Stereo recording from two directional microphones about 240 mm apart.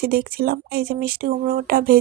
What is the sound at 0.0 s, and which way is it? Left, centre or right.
Speech, right.